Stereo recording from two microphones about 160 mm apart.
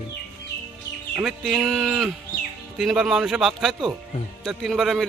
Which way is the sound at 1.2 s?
5° right (ahead or behind).